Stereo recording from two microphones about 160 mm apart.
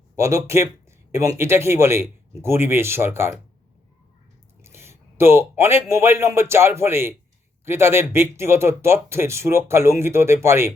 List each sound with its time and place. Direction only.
0.2 s speech: 20° right (ahead or behind)
4.6 s a man's voice: 15° right (ahead or behind)